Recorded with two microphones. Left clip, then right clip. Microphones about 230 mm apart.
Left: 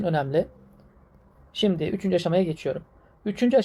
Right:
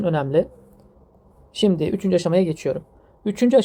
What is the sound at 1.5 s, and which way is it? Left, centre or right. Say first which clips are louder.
A woman's voice: right 4 dB; right.